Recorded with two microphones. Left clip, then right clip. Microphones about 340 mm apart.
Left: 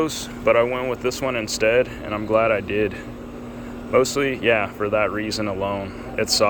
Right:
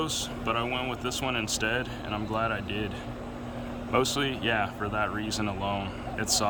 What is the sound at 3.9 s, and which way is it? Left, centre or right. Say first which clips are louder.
Speech: left 8 dB; centre.